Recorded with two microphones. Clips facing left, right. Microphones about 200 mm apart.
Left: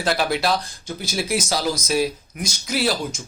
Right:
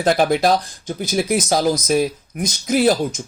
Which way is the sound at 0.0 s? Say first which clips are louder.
Right 6 dB; 45° right (ahead or behind).